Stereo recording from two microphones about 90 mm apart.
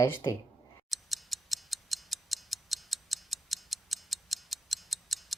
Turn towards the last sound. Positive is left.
turn(degrees=0)  # may be behind; listen again after turning